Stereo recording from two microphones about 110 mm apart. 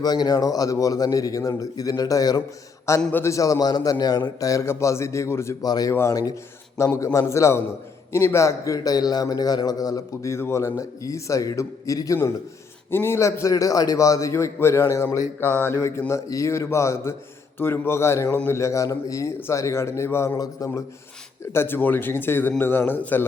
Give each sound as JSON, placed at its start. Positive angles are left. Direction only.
{"t": 0.0, "sound": "a man's voice", "side_deg": 35}
{"t": 3.0, "sound": "a man's voice", "side_deg": 15}
{"t": 3.2, "sound": "a man's voice", "side_deg": 30}
{"t": 5.6, "sound": "a man's voice", "side_deg": 35}
{"t": 5.9, "sound": "a man's voice", "side_deg": 25}
{"t": 21.5, "sound": "a man's voice", "side_deg": 20}